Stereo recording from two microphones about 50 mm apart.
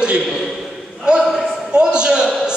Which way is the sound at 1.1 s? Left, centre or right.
Centre.